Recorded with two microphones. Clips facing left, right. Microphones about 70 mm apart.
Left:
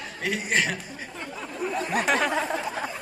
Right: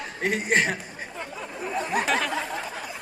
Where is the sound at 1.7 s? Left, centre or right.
Centre.